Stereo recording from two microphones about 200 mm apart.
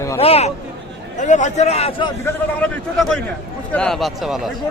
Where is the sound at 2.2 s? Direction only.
10° left (ahead or behind).